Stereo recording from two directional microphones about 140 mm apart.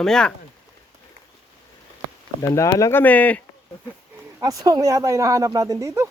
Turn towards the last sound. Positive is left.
turn(degrees=-20)  # may be behind; listen again after turning